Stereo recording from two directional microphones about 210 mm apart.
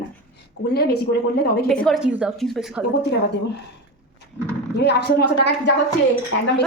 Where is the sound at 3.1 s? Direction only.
55° left (ahead or behind).